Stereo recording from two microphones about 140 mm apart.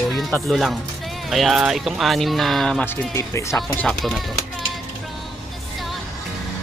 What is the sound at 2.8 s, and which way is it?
Speech, 20° left (ahead or behind).